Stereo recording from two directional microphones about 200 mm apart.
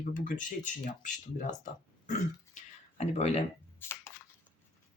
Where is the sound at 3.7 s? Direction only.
10° left (ahead or behind).